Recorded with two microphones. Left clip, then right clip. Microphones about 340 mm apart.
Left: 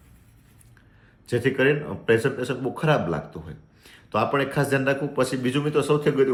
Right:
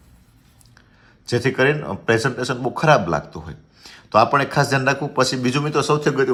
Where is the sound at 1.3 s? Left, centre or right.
Centre.